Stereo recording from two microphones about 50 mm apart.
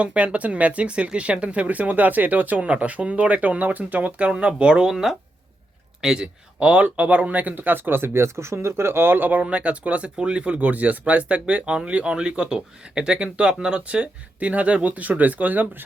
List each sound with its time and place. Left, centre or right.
0.0 s a man's voice: right
6.6 s speech: right
8.5 s speech: right